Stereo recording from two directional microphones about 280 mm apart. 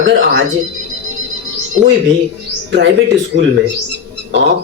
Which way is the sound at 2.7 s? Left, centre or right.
Right.